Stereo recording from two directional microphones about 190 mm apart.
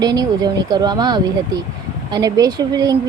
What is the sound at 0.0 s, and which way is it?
Speech, 20° right (ahead or behind).